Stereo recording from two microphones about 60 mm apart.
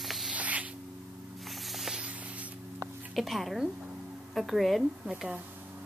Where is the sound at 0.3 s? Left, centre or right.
Right.